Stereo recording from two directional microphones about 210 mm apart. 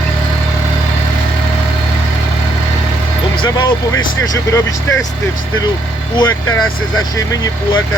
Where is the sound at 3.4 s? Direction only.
20° left (ahead or behind).